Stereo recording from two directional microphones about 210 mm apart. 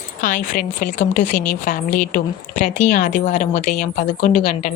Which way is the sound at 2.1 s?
35° left (ahead or behind).